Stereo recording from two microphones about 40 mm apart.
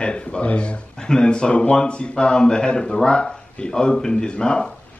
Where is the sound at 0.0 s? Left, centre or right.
Left.